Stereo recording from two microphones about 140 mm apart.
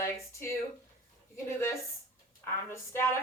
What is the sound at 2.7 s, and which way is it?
Speech, 20° left (ahead or behind).